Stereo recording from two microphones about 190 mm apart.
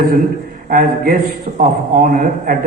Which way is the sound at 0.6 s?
50° right (ahead or behind).